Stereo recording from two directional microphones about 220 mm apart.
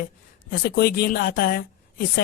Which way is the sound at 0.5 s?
45° left (ahead or behind).